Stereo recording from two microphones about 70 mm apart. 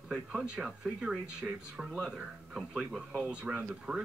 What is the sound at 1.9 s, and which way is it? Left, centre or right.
Speech, centre.